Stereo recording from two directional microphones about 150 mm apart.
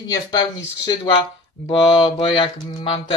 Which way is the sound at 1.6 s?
35° left (ahead or behind).